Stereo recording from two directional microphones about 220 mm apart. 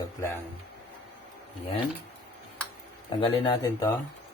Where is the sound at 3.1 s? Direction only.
20° left (ahead or behind).